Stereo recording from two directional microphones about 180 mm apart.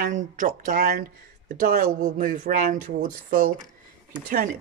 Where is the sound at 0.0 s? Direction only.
45° right (ahead or behind).